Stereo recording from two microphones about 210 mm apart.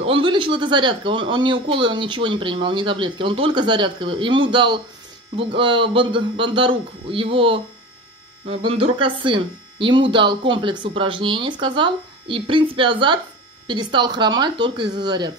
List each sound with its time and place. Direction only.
0.0 s speech: 25° right (ahead or behind)